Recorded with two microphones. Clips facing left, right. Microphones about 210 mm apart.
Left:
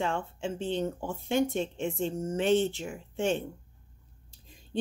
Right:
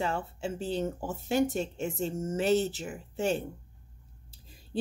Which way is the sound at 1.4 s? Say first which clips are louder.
Even; 40° right (ahead or behind).